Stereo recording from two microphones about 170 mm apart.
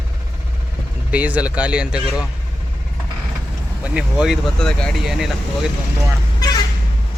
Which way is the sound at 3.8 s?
5° right (ahead or behind).